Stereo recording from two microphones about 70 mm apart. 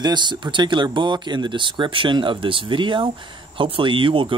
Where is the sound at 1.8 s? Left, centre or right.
Right.